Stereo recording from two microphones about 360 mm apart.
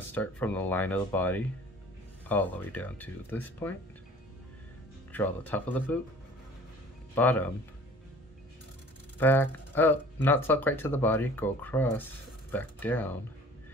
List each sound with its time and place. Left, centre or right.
0.1 s speech: centre
5.1 s speech: centre
7.2 s speech: centre
9.2 s speech: centre